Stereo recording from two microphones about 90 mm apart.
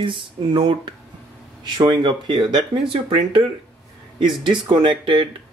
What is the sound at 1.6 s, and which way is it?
Speech, 50° right (ahead or behind).